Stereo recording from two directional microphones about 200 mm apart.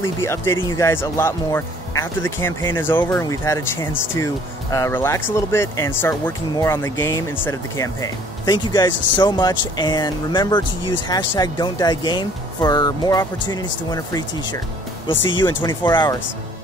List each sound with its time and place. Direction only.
0.0 s speech: 15° left (ahead or behind)
15.6 s speech: 25° left (ahead or behind)